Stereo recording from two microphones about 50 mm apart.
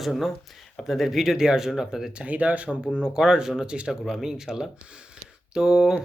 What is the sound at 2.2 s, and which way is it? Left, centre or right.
Speech, right.